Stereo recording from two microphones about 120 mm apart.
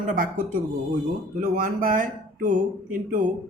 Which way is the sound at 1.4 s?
90° right.